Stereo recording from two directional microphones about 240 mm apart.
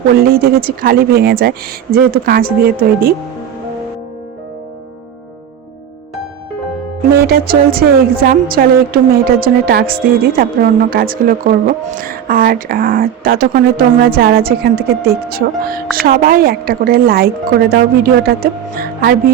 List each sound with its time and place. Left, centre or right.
0.1 s speech: right
7.2 s speech: right